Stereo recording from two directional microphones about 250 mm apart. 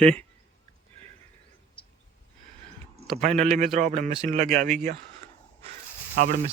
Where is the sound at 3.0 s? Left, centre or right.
Centre.